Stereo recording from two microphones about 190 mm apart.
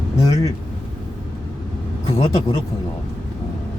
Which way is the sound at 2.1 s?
25° left (ahead or behind).